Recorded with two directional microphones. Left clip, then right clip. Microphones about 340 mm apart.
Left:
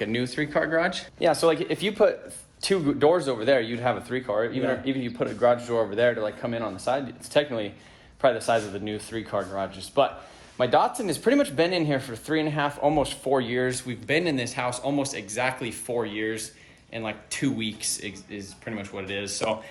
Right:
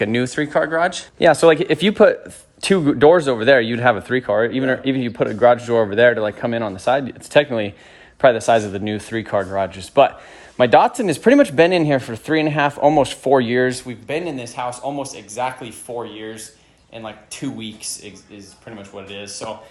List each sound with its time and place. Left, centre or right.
0.0 s speech: right
1.2 s speech: right
14.1 s speech: centre